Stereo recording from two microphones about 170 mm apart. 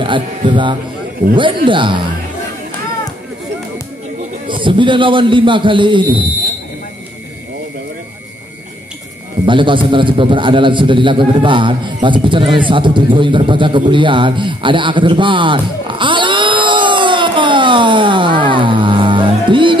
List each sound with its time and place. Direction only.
0.0 s a man's voice: 30° right (ahead or behind)
4.5 s a man's voice: 30° right (ahead or behind)
9.5 s a man's voice: 30° right (ahead or behind)